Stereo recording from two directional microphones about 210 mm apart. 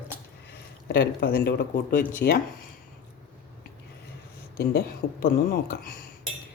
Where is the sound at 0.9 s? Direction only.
45° left (ahead or behind).